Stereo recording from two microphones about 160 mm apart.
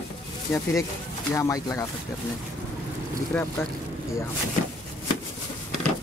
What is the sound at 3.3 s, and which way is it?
Speech, 10° left (ahead or behind).